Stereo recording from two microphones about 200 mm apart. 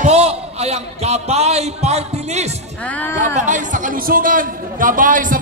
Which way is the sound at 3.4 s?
40° right (ahead or behind).